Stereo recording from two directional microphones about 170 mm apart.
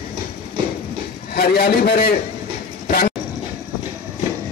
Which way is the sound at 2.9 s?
65° left (ahead or behind).